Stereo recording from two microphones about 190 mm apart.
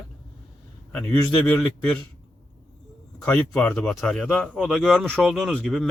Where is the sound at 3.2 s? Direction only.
5° left (ahead or behind).